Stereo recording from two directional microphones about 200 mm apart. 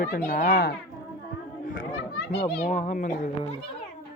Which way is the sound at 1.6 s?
45° left (ahead or behind).